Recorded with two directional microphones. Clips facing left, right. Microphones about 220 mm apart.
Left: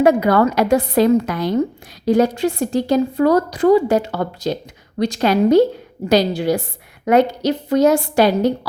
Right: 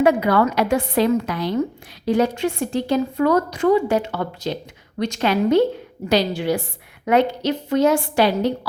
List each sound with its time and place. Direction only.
0.0 s a woman's voice: 40° left (ahead or behind)